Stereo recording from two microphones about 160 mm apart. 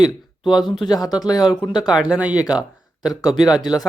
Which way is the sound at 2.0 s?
5° right (ahead or behind).